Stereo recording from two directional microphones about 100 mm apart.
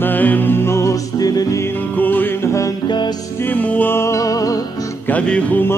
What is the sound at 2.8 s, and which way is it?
Music, 45° left (ahead or behind).